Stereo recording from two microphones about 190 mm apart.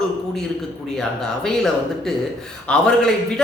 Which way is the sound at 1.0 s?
5° left (ahead or behind).